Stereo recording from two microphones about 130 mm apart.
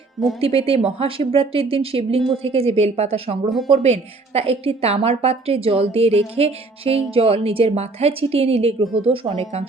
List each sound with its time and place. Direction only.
0.3 s a woman's voice: 50° right (ahead or behind)